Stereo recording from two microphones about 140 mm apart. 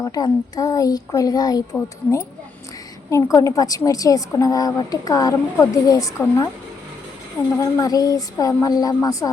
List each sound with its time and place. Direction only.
0.0 s a woman's voice: 25° left (ahead or behind)
7.6 s a woman's voice: 25° left (ahead or behind)